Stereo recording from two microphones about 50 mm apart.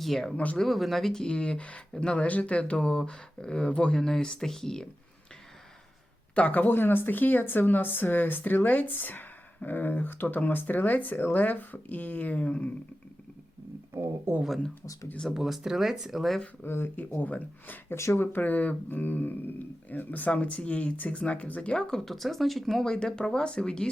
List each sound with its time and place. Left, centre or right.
0.0 s speech: centre
0.3 s speech: left
0.6 s speech: centre; by 4.0 s left
4.0 s speech: centre
6.3 s speech: left
6.7 s speech: left
13.9 s speech: right
15.3 s speech: centre
16.6 s speech: left
17.2 s speech: left
17.9 s speech: left
18.2 s speech: left
21.8 s speech: centre
22.8 s speech: centre